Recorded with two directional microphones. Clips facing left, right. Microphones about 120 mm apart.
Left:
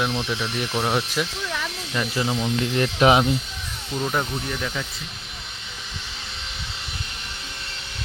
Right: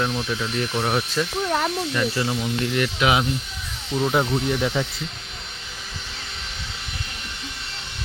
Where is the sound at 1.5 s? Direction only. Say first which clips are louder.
Right 7 dB; 50° right (ahead or behind).